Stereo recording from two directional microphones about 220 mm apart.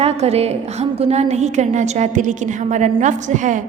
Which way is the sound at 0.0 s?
30° right (ahead or behind).